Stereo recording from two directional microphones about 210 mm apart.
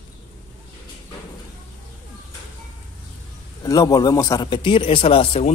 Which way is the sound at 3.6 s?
15° left (ahead or behind).